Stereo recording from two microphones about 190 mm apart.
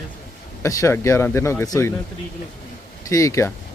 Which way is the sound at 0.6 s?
15° left (ahead or behind).